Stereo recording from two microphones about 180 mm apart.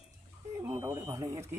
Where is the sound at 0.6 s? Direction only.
15° right (ahead or behind).